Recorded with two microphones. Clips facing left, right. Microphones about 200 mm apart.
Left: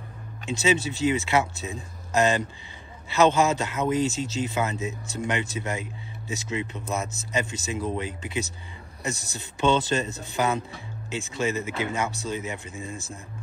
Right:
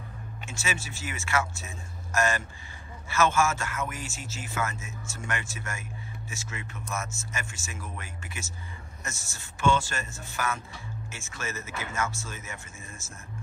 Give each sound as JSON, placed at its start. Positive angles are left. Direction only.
{"t": 0.5, "sound": "speech", "side_deg": 20}